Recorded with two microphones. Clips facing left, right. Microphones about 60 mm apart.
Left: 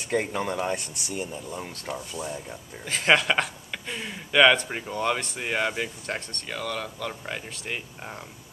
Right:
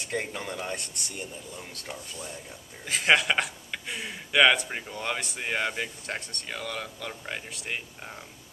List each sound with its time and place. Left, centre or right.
0.0 s speech: centre
2.8 s speech: centre